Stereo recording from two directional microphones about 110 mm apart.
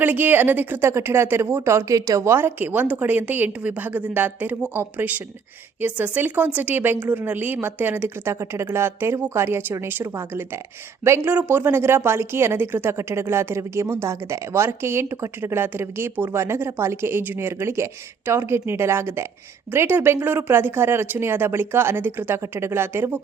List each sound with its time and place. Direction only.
0.0 s a woman's voice: 15° right (ahead or behind)